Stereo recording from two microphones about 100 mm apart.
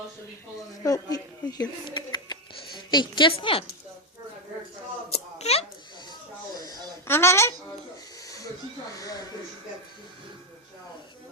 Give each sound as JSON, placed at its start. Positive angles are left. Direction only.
{"t": 0.9, "sound": "speech", "side_deg": 35}
{"t": 5.4, "sound": "a sound", "side_deg": 90}
{"t": 7.1, "sound": "speech", "side_deg": 25}
{"t": 9.0, "sound": "speech", "side_deg": 35}